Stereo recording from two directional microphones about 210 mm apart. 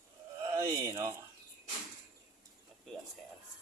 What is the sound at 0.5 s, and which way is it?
Speech, 15° right (ahead or behind).